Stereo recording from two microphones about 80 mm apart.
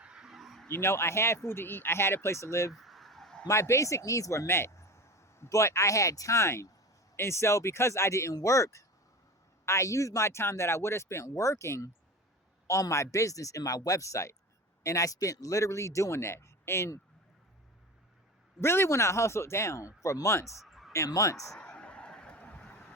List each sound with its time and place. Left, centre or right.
0.0 s bow-wow: centre
0.7 s speech: left
2.7 s a sound: centre
3.4 s speech: left
18.6 s speech: left
20.7 s a sound: centre
20.9 s speech: left
21.6 s vehicle: centre